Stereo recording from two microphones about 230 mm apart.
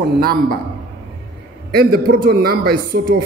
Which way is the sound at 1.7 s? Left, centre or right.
Right.